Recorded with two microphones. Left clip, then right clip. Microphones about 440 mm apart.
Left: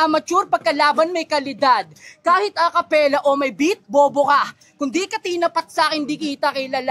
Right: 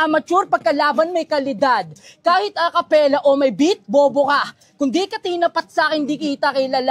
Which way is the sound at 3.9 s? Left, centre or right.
Centre.